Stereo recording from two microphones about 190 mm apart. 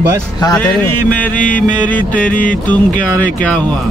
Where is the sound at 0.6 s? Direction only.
10° left (ahead or behind).